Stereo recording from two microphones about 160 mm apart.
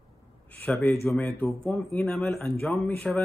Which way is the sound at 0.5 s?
5° left (ahead or behind).